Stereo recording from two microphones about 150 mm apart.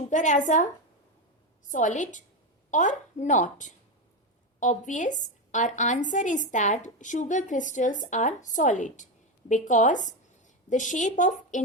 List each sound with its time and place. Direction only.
0.1 s a woman's voice: 55° left (ahead or behind)